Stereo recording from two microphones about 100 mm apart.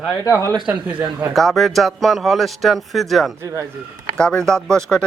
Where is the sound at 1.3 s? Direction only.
Centre (ahead or behind).